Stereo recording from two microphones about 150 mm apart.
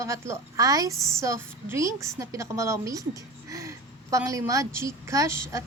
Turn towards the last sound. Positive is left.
turn(degrees=-20)  # may be behind; listen again after turning